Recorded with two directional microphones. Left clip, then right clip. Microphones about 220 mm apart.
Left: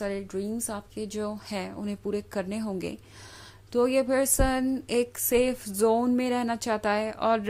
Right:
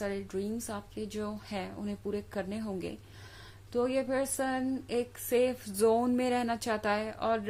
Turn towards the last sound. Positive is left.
turn(degrees=25)  # may be behind; listen again after turning